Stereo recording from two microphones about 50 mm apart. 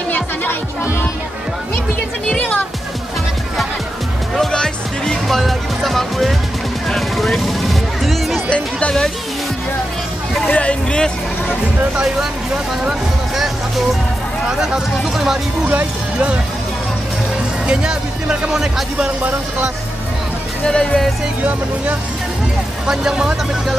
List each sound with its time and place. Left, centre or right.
4.4 s music: centre
8.5 s speech: left
10.4 s speech: left
14.6 s speech: centre
17.6 s speech: centre
20.6 s speech: centre
22.8 s speech: centre